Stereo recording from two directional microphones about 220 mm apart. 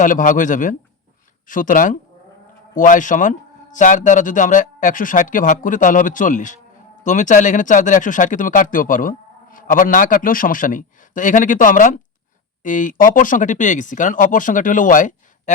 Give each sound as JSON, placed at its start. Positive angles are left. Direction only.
{"t": 0.0, "sound": "speech", "side_deg": 35}